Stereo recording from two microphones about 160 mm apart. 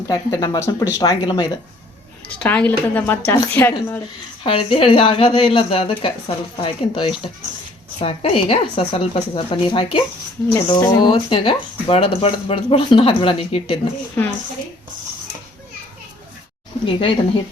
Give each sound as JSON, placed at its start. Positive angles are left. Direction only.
{"t": 0.1, "sound": "speech", "side_deg": 20}
{"t": 2.2, "sound": "speech", "side_deg": 10}
{"t": 4.4, "sound": "speech", "side_deg": 35}
{"t": 14.2, "sound": "speech", "side_deg": 10}
{"t": 16.8, "sound": "speech", "side_deg": 35}